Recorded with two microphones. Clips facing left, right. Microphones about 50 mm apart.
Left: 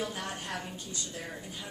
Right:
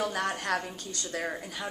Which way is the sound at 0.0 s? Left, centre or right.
Right.